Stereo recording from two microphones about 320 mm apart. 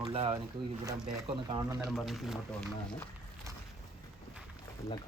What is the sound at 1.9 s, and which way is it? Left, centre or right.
Speech, centre.